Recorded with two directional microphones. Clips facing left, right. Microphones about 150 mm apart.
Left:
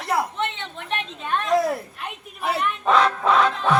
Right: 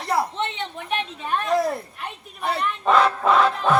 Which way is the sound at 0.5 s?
15° right (ahead or behind).